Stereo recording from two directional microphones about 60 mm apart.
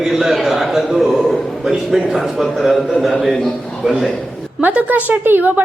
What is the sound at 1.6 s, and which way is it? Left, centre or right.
A man's voice, centre.